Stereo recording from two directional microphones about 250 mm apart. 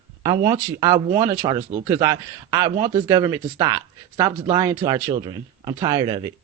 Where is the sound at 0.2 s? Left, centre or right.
Centre.